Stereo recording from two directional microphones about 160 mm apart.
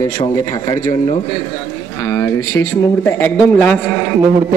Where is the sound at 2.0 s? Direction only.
15° left (ahead or behind).